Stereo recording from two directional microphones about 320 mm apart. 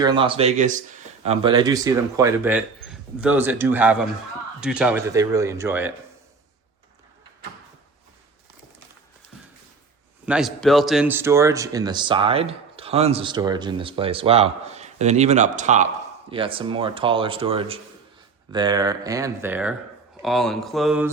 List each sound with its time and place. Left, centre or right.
0.0 s speech: centre
10.2 s speech: centre